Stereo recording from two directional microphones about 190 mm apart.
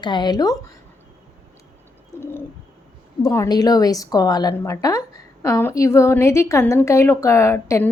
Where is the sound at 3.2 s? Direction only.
15° left (ahead or behind).